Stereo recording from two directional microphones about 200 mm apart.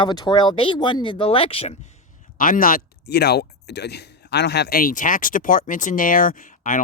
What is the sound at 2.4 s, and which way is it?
Speech, 45° left (ahead or behind).